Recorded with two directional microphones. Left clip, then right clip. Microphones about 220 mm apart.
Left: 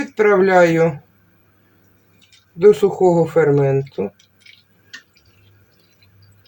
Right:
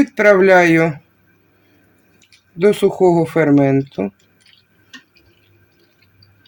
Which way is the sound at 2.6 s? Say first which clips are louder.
Left 1 dB; 55° right (ahead or behind).